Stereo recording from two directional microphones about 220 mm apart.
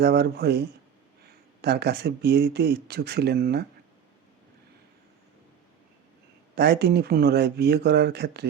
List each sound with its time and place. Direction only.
0.0 s speech: 45° right (ahead or behind)
6.6 s speech: 50° right (ahead or behind)